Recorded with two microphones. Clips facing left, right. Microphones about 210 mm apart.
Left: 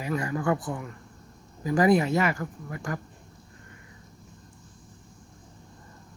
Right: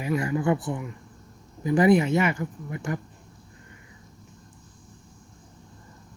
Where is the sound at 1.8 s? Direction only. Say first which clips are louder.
Right 2 dB; 20° right (ahead or behind).